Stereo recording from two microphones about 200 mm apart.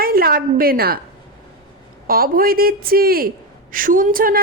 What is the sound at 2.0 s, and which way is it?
Speech, 45° right (ahead or behind).